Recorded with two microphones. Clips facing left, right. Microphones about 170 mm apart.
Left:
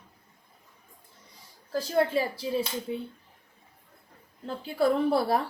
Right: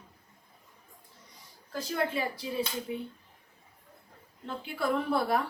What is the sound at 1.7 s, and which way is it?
Speech, 30° left (ahead or behind).